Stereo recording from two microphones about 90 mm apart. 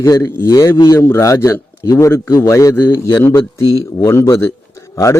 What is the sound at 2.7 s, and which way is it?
Speech, 20° left (ahead or behind).